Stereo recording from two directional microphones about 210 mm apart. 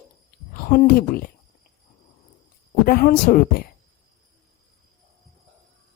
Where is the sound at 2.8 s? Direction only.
45° left (ahead or behind).